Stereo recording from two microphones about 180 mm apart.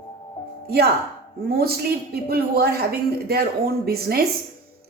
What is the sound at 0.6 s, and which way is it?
Speech, 60° right (ahead or behind).